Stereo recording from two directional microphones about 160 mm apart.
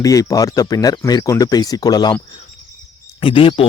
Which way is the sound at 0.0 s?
20° left (ahead or behind).